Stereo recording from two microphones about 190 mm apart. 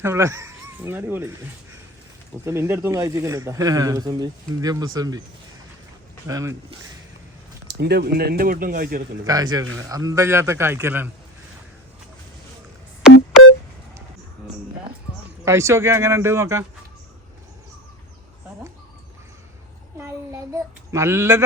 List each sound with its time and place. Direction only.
0.0 s speech: 15° right (ahead or behind)
2.4 s speech: 15° right (ahead or behind)
6.2 s speech: 15° right (ahead or behind)
7.7 s speech: 60° right (ahead or behind)
9.2 s speech: 20° right (ahead or behind)
15.4 s speech: 15° right (ahead or behind)
20.0 s a sound: 15° right (ahead or behind)